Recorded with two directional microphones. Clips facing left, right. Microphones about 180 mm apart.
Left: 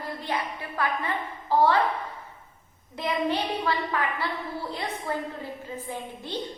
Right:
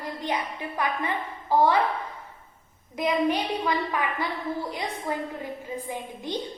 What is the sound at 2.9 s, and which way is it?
A woman's voice, 15° right (ahead or behind).